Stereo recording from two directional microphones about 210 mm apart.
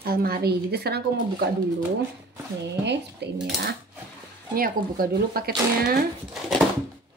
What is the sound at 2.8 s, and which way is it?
Speech, 55° right (ahead or behind).